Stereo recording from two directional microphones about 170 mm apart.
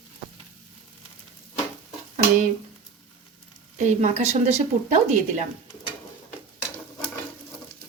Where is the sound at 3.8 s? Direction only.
45° right (ahead or behind).